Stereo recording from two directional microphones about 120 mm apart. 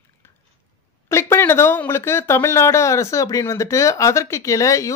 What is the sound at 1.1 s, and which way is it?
Speech, 20° left (ahead or behind).